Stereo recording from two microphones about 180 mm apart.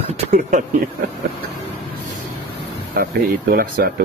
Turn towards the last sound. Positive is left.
turn(degrees=-55)  # may be behind; listen again after turning